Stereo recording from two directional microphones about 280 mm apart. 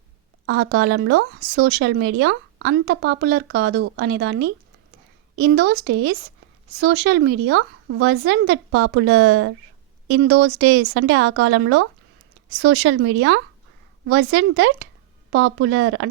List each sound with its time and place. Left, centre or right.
0.4 s speech: right